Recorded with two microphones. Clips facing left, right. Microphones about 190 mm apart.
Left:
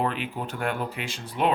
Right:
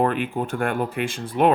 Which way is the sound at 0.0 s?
50° right (ahead or behind).